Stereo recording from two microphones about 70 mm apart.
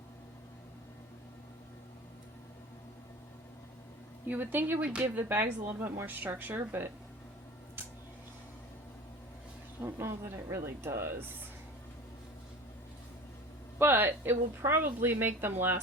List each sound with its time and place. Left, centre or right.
4.3 s speech: right
9.8 s a woman's voice: right
13.7 s a woman's voice: right